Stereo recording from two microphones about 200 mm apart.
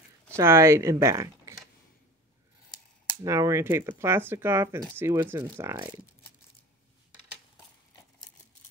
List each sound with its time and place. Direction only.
0.4 s speech: 15° right (ahead or behind)
3.3 s speech: 15° right (ahead or behind)